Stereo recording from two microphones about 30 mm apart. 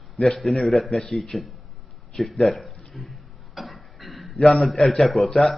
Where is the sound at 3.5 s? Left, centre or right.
Centre.